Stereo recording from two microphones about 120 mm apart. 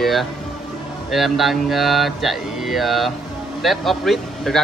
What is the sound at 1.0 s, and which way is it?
A man's voice, centre (ahead or behind).